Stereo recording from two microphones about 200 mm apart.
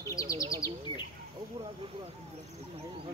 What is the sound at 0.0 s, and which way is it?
Bird, 15° left (ahead or behind).